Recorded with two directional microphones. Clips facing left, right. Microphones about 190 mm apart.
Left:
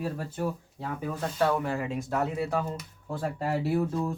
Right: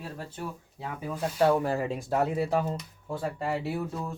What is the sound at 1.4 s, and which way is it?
Speech, 30° right (ahead or behind).